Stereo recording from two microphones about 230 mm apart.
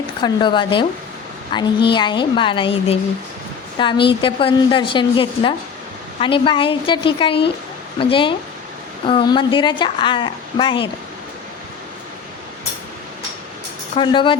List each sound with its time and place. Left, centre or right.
0.2 s a woman's voice: centre
13.9 s a woman's voice: left